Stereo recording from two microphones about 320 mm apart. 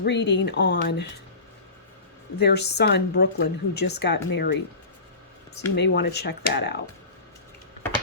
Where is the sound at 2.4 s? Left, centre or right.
Left.